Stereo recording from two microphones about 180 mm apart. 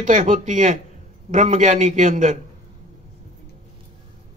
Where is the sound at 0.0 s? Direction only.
45° right (ahead or behind).